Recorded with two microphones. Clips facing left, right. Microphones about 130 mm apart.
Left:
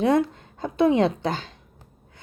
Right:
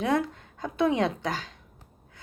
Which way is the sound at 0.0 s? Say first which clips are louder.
Left 6 dB; 25° left (ahead or behind).